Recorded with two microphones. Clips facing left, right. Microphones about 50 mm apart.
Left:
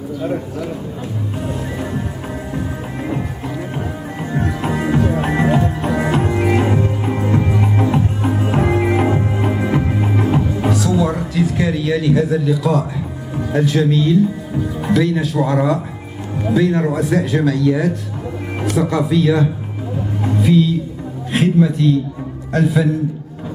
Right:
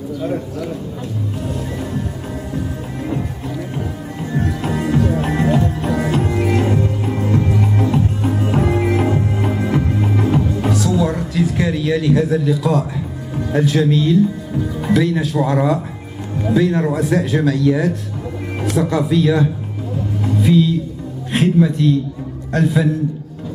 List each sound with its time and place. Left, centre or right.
0.2 s speech: centre
2.5 s music: left
15.0 s speech: centre
21.3 s music: centre
22.5 s speech: centre